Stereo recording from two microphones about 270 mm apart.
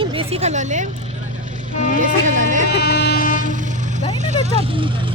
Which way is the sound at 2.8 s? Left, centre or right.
Left.